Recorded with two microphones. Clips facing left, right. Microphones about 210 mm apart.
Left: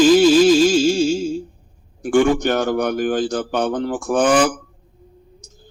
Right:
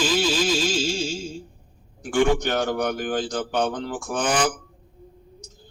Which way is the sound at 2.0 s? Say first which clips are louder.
Left 5 dB; 55° left (ahead or behind).